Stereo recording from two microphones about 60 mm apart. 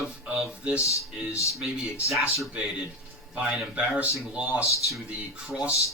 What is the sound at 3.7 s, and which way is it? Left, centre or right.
Speech, centre.